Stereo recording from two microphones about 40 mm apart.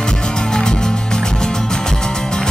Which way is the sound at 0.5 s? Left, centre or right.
Centre.